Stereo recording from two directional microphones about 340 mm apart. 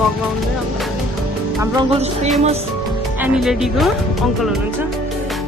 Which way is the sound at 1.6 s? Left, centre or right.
Centre.